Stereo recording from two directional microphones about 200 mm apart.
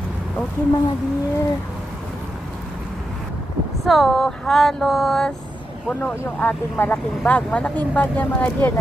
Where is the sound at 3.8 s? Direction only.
Centre (ahead or behind).